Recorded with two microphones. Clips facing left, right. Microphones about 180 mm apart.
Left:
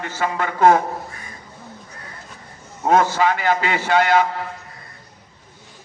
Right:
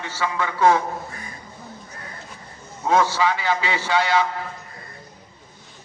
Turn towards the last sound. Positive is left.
turn(degrees=50)  # may be behind; listen again after turning